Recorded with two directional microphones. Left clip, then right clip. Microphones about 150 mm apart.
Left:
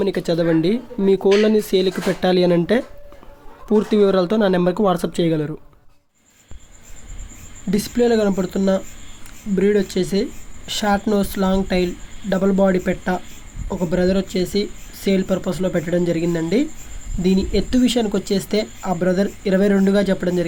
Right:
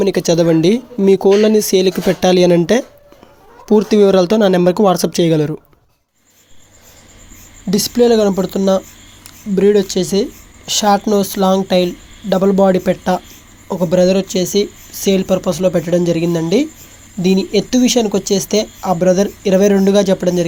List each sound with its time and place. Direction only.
0.0 s speech: 20° right (ahead or behind)
3.7 s speech: 20° right (ahead or behind)
7.7 s speech: 20° right (ahead or behind)